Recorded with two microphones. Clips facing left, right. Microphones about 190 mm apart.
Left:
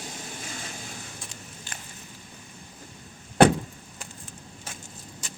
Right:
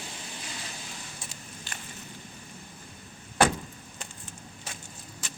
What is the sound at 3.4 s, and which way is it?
Vehicle, 65° left (ahead or behind).